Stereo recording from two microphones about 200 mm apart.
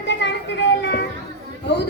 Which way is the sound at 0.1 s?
65° left (ahead or behind).